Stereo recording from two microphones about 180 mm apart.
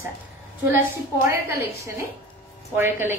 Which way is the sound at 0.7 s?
15° right (ahead or behind).